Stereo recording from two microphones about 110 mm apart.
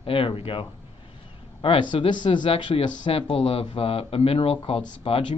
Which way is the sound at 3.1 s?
60° left (ahead or behind).